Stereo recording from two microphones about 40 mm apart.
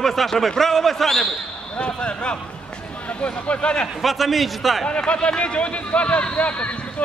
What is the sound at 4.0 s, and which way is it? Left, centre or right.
Speech, centre.